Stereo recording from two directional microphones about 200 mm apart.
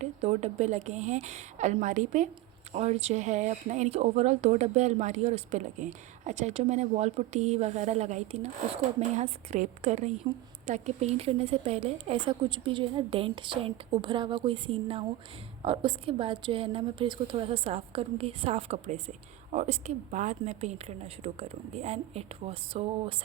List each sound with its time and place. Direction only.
0.0 s a woman's voice: 35° right (ahead or behind)